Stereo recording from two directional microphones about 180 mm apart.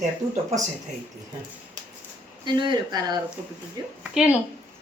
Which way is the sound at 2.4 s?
25° right (ahead or behind).